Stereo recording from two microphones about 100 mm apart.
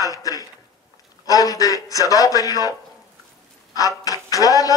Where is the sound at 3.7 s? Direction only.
35° left (ahead or behind).